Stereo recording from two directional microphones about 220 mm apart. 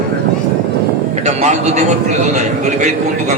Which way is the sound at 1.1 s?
30° right (ahead or behind).